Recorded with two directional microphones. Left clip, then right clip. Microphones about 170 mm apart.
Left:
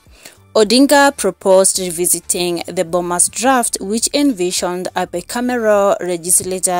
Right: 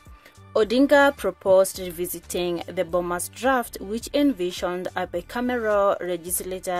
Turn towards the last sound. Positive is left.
turn(degrees=45)  # may be behind; listen again after turning